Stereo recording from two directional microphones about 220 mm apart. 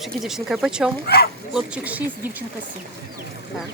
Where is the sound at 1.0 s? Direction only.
45° left (ahead or behind).